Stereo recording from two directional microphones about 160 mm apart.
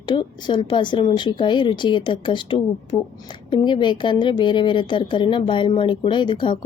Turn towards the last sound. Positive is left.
turn(degrees=30)  # may be behind; listen again after turning